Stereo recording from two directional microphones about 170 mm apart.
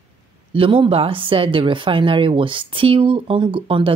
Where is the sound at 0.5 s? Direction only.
30° right (ahead or behind).